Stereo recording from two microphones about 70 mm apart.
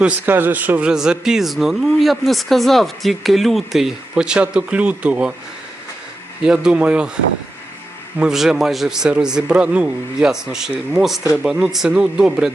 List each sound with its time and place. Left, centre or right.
0.3 s a man's voice: right
0.9 s speech: centre
6.4 s speech: centre
8.2 s speech: centre